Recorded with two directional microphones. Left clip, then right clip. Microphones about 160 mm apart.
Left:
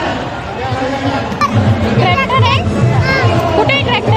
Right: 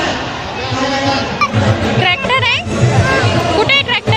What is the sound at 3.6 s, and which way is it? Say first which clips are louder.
Music: right 2 dB; 5° right (ahead or behind).